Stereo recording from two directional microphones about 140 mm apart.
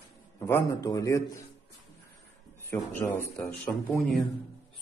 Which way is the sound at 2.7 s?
15° left (ahead or behind).